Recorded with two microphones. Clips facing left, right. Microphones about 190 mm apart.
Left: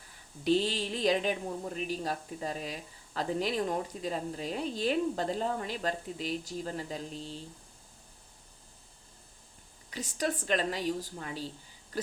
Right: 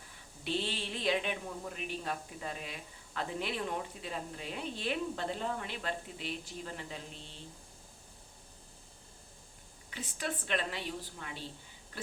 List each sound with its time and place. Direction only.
0.4 s a woman's voice: 40° left (ahead or behind)
9.9 s a woman's voice: 40° left (ahead or behind)